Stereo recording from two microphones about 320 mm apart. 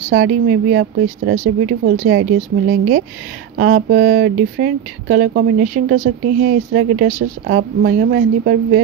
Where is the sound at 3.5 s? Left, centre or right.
Right.